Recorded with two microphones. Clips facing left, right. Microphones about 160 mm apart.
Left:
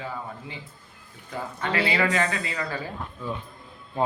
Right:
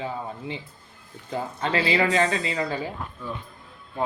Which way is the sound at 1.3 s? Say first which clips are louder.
Right 3 dB; 25° right (ahead or behind).